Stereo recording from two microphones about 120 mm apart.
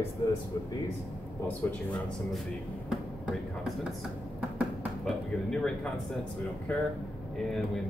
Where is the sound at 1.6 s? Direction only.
20° left (ahead or behind).